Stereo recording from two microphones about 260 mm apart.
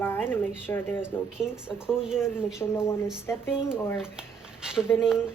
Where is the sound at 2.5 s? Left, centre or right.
Centre.